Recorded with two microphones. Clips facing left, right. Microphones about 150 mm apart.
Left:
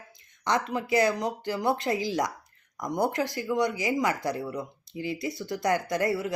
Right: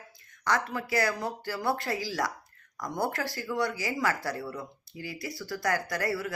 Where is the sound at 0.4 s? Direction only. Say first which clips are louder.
Left 2 dB; 20° left (ahead or behind).